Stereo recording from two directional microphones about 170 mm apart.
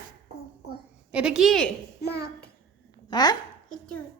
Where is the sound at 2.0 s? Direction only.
70° left (ahead or behind).